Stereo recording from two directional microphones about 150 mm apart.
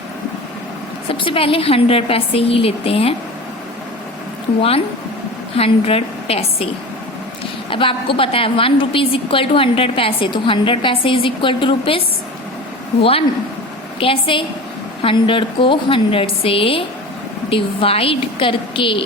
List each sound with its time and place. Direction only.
1.0 s a woman's voice: 35° left (ahead or behind)
5.5 s a woman's voice: 40° left (ahead or behind)
7.7 s a woman's voice: 35° left (ahead or behind)